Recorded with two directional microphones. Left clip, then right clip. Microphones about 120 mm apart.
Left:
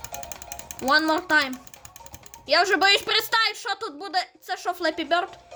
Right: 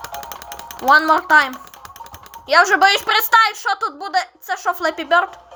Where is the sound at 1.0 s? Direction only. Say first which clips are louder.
Right 8 dB; 30° left (ahead or behind).